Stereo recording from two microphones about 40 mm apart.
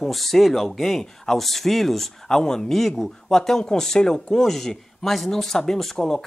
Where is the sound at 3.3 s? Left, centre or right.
Centre.